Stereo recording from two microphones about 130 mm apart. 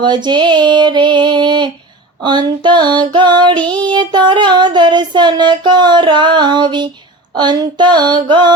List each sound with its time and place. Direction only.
0.0 s child singing: 35° right (ahead or behind)